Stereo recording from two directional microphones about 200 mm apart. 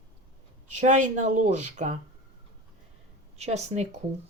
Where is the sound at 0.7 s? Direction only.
35° right (ahead or behind).